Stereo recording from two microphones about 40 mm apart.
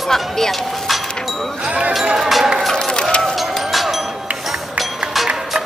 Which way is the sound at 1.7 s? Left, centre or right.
Right.